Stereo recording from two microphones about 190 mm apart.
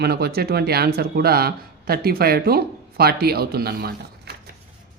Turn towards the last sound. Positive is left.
turn(degrees=-55)  # may be behind; listen again after turning